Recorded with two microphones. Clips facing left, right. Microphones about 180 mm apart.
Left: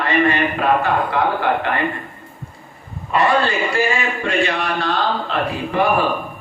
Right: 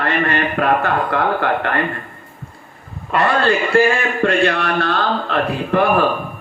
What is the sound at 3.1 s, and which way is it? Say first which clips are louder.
A man's voice: right 1 dB; 60° right (ahead or behind).